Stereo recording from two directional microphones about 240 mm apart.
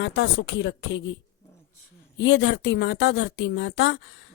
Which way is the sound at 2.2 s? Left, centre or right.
Left.